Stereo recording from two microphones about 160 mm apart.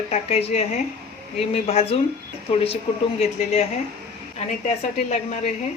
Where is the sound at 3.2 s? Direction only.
40° left (ahead or behind).